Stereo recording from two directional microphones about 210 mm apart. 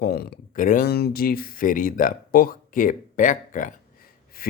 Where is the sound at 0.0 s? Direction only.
45° left (ahead or behind).